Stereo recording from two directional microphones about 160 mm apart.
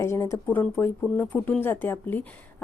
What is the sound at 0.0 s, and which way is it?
Speech, 15° left (ahead or behind).